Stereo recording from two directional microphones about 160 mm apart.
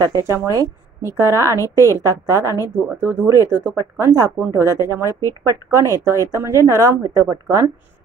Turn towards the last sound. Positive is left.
turn(degrees=-20)  # may be behind; listen again after turning